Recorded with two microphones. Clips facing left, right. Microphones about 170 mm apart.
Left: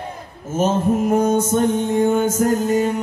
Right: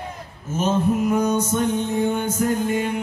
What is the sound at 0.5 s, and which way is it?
Mantra, 50° left (ahead or behind).